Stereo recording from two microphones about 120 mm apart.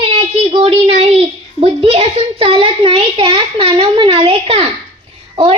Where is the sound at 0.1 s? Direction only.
55° right (ahead or behind).